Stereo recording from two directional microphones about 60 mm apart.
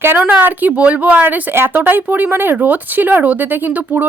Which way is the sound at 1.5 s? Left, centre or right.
Right.